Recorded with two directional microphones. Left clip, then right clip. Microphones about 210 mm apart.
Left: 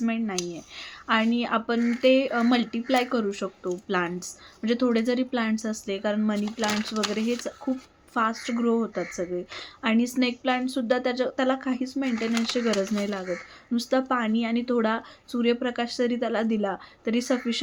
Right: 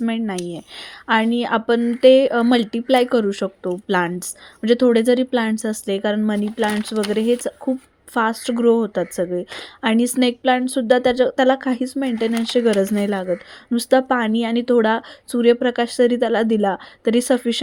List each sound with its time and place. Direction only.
0.0 s speech: 40° right (ahead or behind)